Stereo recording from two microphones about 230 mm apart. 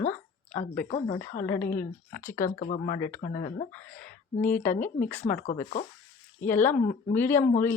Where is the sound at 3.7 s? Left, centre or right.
Centre.